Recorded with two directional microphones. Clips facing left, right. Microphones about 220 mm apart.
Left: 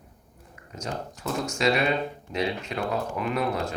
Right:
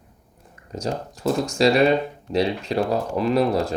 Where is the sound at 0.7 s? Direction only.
35° right (ahead or behind).